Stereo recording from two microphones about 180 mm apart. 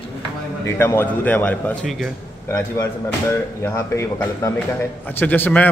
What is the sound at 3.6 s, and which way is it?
A man's voice, 15° left (ahead or behind).